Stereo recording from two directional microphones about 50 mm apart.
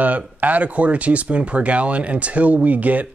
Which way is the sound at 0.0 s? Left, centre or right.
Right.